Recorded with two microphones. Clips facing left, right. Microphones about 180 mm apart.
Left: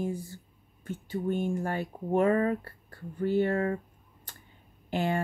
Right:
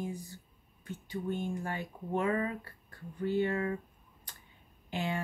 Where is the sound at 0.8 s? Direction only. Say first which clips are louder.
Left 5 dB; 50° left (ahead or behind).